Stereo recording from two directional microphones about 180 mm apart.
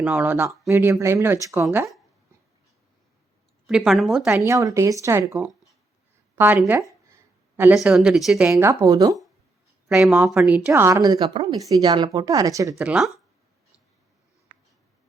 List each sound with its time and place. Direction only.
0.0 s speech: 10° right (ahead or behind)
3.7 s speech: 5° right (ahead or behind)
4.3 s speech: 15° right (ahead or behind)
6.7 s a sound: 15° right (ahead or behind)
7.9 s speech: 5° right (ahead or behind)
8.5 s a woman's voice: 20° right (ahead or behind)
9.9 s a woman's voice: 5° right (ahead or behind)
12.8 s speech: 5° right (ahead or behind)